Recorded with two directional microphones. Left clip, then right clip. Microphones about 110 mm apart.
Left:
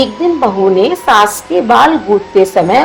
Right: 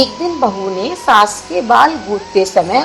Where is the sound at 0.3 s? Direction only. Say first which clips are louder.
Left 7 dB; 55° left (ahead or behind).